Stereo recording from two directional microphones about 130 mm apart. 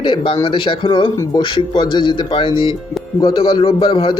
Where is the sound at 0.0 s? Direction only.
40° left (ahead or behind).